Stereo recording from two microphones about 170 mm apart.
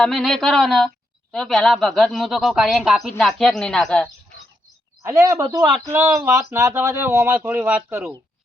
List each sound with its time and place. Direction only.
0.0 s speech: 5° left (ahead or behind)
5.0 s speech: 15° right (ahead or behind)